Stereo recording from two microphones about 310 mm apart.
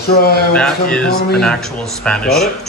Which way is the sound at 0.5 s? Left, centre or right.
Centre.